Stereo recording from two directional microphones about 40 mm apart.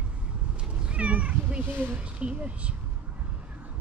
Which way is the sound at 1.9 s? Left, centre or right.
Right.